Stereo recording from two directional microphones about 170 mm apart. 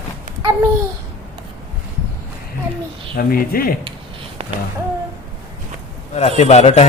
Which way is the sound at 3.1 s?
60° left (ahead or behind).